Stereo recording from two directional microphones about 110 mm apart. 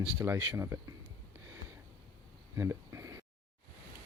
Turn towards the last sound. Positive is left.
turn(degrees=-30)  # may be behind; listen again after turning